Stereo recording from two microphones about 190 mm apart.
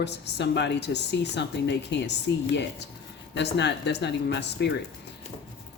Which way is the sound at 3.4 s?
65° left (ahead or behind).